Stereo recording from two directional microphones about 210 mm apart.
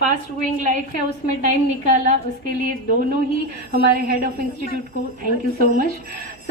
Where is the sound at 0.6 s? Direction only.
35° right (ahead or behind).